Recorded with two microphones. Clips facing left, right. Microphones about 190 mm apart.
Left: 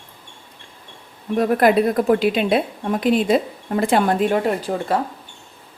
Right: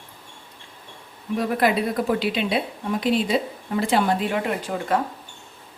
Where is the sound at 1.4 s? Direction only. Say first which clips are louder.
Left 6 dB; 50° left (ahead or behind).